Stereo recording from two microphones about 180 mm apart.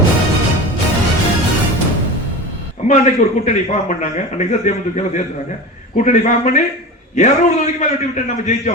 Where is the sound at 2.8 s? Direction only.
40° left (ahead or behind).